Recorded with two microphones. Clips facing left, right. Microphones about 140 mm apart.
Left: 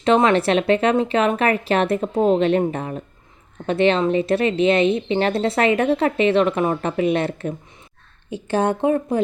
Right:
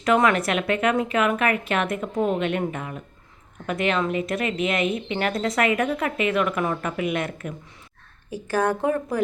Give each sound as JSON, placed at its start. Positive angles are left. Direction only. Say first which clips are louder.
{"t": 0.0, "sound": "a woman's voice", "louder": "left 4 dB", "side_deg": 25}